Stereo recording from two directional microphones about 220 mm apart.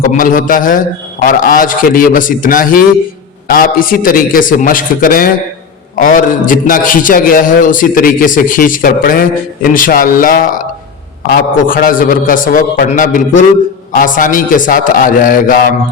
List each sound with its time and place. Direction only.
0.0 s a man's voice: 40° left (ahead or behind)